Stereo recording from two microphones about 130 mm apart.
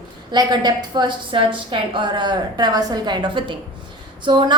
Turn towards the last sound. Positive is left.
turn(degrees=-35)  # may be behind; listen again after turning